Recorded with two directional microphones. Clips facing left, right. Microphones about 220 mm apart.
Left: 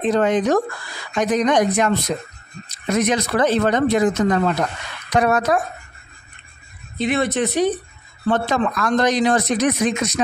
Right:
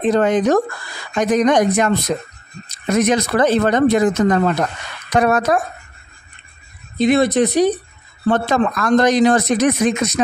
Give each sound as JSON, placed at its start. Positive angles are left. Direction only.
{"t": 0.1, "sound": "speech", "side_deg": -45}
{"t": 2.9, "sound": "speech", "side_deg": -45}
{"t": 7.0, "sound": "speech", "side_deg": -40}
{"t": 8.3, "sound": "speech", "side_deg": -50}